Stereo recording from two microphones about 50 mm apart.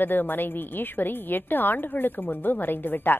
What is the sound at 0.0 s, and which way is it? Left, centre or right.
A woman's voice, left.